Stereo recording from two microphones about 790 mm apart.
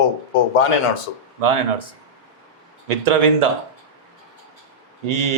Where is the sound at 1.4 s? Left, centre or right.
Right.